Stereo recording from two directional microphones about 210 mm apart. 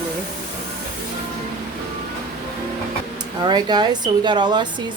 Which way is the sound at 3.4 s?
20° right (ahead or behind).